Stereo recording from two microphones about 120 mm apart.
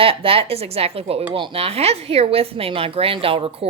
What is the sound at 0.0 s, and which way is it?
Speech, 50° right (ahead or behind).